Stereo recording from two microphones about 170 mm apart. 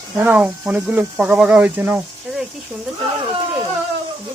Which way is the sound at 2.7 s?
10° right (ahead or behind).